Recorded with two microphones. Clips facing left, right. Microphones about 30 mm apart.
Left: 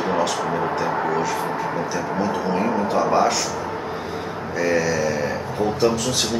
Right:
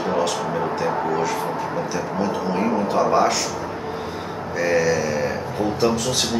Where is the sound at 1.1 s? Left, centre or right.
Centre.